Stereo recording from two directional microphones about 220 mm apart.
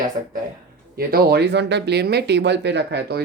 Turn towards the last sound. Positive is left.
turn(degrees=-50)  # may be behind; listen again after turning